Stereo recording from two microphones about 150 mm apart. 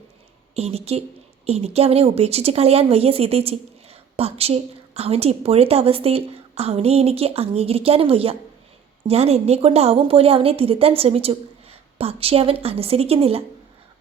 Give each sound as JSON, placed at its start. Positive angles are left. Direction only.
{"t": 0.5, "sound": "speech", "side_deg": -45}